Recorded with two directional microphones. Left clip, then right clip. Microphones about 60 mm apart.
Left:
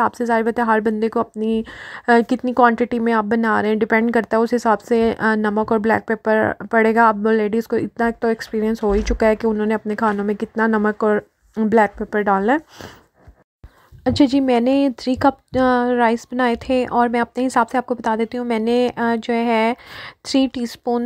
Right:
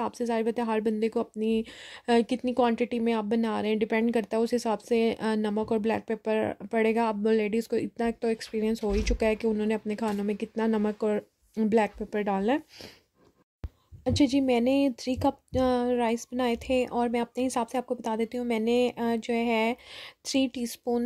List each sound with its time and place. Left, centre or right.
0.0 s a woman's voice: left
7.2 s speech: left
14.0 s a woman's voice: left